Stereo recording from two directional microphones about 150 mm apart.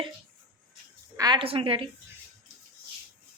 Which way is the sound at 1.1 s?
30° right (ahead or behind).